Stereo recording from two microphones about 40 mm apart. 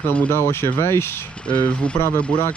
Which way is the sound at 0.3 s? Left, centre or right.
Left.